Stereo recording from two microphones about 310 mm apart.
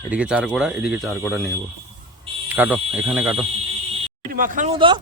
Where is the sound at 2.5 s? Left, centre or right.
Centre.